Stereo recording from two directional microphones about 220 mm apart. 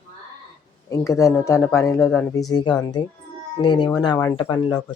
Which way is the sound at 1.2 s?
15° left (ahead or behind).